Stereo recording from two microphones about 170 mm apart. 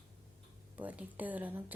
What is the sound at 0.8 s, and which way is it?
Speech, 10° right (ahead or behind).